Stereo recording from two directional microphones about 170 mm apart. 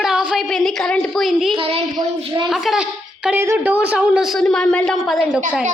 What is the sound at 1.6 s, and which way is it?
Speech, 35° right (ahead or behind).